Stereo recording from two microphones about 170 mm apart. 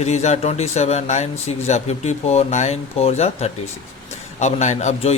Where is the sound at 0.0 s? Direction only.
40° left (ahead or behind).